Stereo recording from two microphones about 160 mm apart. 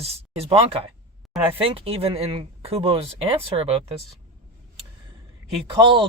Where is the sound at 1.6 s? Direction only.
35° right (ahead or behind).